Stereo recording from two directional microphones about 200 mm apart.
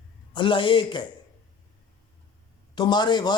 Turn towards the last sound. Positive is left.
turn(degrees=20)  # may be behind; listen again after turning